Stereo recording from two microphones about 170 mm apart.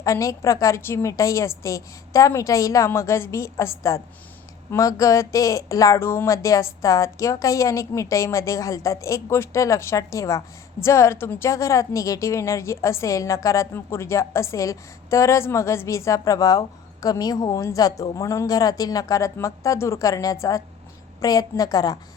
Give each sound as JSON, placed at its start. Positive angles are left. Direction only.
{"t": 0.0, "sound": "a woman's voice", "side_deg": 20}